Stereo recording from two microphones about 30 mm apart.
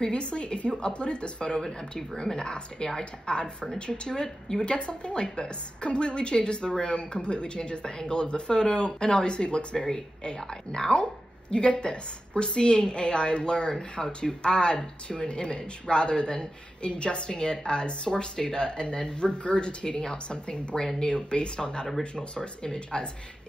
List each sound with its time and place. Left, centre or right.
0.1 s speech: left
4.6 s speech: left